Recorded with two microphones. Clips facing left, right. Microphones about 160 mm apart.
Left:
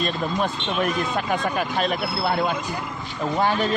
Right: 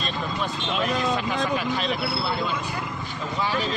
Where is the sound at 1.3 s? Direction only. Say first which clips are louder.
Left 1 dB; 50° left (ahead or behind).